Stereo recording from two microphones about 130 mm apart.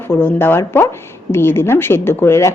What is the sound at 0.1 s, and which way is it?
A woman's voice, 15° left (ahead or behind).